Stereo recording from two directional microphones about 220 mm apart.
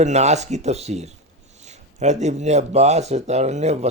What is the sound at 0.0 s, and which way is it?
A man's voice, 30° right (ahead or behind).